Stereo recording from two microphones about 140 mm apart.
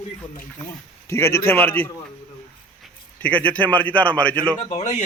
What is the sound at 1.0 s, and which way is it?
Speech, 20° left (ahead or behind).